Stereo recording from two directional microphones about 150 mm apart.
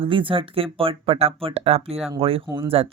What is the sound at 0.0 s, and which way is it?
Speech, 35° right (ahead or behind).